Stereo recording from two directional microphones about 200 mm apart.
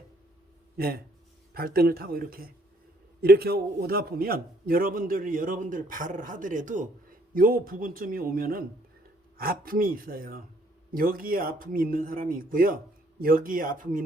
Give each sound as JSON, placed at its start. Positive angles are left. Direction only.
{"t": 0.8, "sound": "a man's voice", "side_deg": -50}